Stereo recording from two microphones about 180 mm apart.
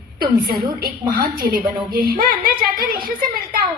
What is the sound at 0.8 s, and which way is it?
A woman's voice, 55° right (ahead or behind).